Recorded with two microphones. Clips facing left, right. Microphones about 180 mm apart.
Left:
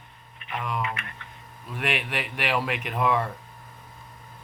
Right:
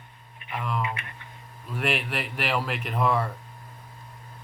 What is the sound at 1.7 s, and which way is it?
Speech, centre (ahead or behind).